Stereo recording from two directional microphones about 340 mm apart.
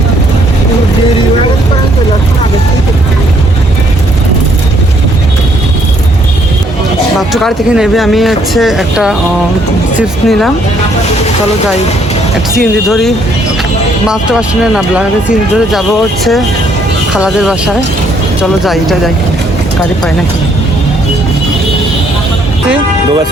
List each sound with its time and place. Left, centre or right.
7.2 s speech: centre
10.2 s speech: centre
12.5 s speech: centre
17.2 s speech: centre
18.6 s speech: centre